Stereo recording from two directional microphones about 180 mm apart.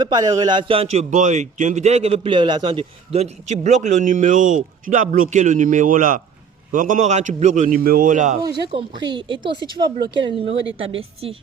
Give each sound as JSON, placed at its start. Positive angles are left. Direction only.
{"t": 0.0, "sound": "a man's voice", "side_deg": -20}
{"t": 9.0, "sound": "a man's voice", "side_deg": -25}